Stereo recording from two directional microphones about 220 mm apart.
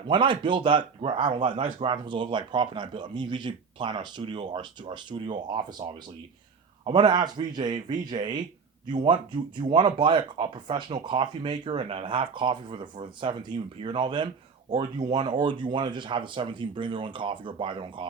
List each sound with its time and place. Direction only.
0.1 s speech: 20° right (ahead or behind)